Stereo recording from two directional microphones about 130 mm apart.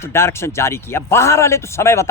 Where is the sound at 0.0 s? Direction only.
20° left (ahead or behind).